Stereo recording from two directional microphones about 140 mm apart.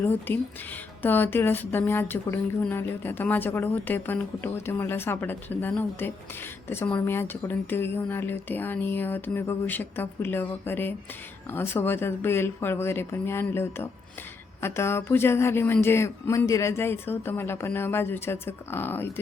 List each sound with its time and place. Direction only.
0.0 s speech: 15° left (ahead or behind)